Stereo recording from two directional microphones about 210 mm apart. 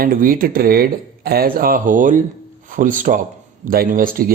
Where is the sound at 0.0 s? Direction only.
45° right (ahead or behind).